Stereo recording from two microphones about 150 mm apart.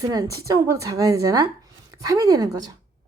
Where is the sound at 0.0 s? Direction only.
25° right (ahead or behind).